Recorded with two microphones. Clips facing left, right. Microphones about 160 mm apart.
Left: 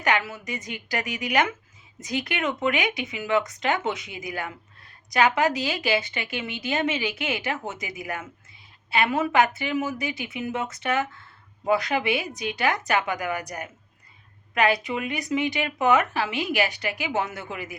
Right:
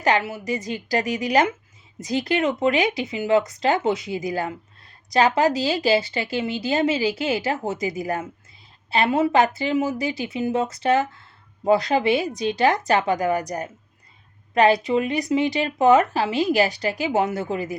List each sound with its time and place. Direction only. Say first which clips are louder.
0.0 s speech: right 4 dB; 30° right (ahead or behind)